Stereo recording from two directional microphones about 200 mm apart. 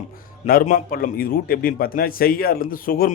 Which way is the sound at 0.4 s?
45° left (ahead or behind).